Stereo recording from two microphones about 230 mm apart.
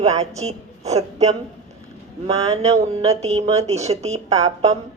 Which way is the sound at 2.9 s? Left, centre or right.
Right.